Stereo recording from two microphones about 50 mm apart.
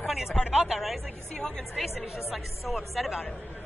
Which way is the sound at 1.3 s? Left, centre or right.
Centre.